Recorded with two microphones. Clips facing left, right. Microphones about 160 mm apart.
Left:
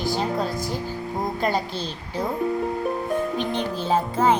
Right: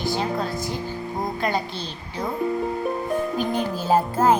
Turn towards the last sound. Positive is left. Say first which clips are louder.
# right 2 dB
turn(degrees=-5)  # may be behind; listen again after turning